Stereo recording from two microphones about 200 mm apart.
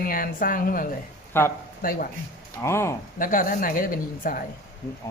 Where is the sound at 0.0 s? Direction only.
45° left (ahead or behind).